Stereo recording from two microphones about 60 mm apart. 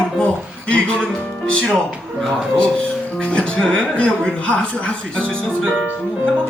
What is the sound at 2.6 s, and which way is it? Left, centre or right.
A woman's voice, centre.